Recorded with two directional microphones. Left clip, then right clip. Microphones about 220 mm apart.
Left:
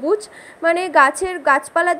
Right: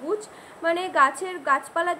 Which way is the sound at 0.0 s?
35° left (ahead or behind).